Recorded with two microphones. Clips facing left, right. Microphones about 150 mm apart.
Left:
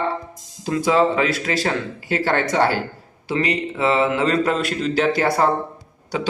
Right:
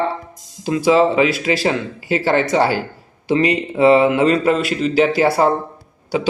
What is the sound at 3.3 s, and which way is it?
Speech, 20° right (ahead or behind).